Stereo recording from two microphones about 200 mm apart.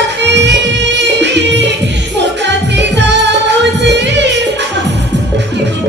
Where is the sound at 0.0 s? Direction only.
60° right (ahead or behind).